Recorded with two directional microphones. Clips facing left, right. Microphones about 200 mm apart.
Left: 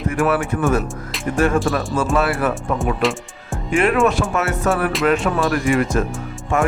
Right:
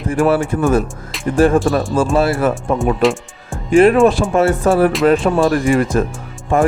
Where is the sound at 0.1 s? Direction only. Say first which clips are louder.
Right 5 dB; 30° right (ahead or behind).